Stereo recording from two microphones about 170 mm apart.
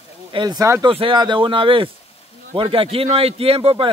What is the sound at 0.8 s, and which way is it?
Speech, 30° right (ahead or behind).